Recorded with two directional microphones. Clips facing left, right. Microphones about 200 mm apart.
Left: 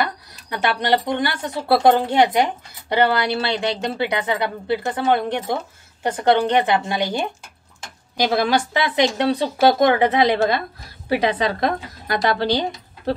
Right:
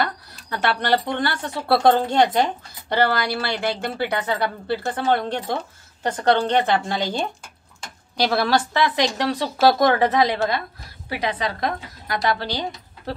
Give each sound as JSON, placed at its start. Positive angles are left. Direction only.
{"t": 0.0, "sound": "a woman's voice", "side_deg": 15}